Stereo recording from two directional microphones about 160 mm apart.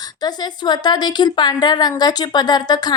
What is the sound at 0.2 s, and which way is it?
A woman's voice, 25° left (ahead or behind).